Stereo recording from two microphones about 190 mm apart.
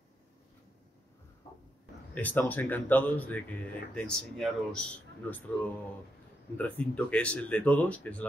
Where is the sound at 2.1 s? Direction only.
10° left (ahead or behind).